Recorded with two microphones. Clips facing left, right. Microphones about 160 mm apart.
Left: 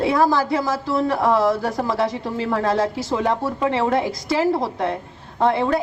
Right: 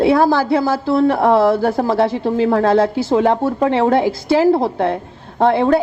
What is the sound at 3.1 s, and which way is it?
A woman's voice, 30° right (ahead or behind).